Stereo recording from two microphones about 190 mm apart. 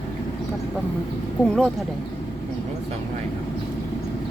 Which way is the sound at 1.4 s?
5° left (ahead or behind).